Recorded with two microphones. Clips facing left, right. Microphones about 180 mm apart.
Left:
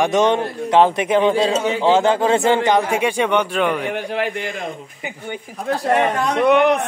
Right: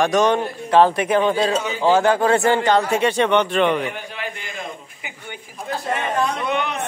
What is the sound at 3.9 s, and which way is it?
Speech, 65° left (ahead or behind).